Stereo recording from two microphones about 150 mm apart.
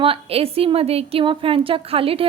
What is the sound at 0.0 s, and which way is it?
A woman's voice, 40° right (ahead or behind).